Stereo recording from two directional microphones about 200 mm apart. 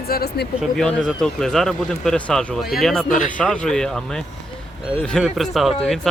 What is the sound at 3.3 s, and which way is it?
Speech, 5° left (ahead or behind).